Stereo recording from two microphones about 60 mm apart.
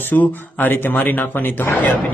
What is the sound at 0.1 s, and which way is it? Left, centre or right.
A man's voice, left.